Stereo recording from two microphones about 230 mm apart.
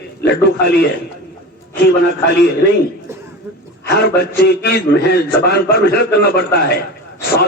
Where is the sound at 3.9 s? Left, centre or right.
Left.